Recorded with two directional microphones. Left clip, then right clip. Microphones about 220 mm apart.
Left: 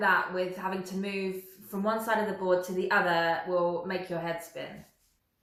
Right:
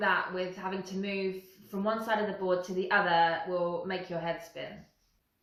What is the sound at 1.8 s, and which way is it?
Speech, 10° left (ahead or behind).